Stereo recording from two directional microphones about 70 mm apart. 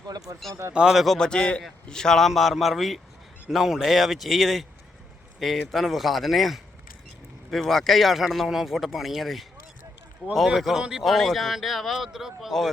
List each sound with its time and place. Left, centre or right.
0.3 s speech: right
0.7 s speech: centre
1.3 s a man's voice: centre